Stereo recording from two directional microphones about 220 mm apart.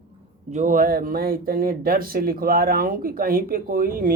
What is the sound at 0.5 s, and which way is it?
Speech, 35° right (ahead or behind).